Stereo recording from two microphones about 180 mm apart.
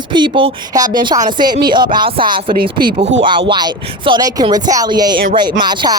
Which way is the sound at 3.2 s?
25° right (ahead or behind).